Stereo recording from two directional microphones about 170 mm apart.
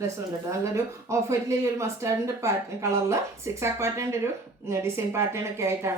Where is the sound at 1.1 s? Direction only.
15° right (ahead or behind).